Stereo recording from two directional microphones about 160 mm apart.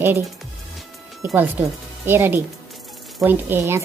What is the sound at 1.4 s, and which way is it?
Speech, 15° right (ahead or behind).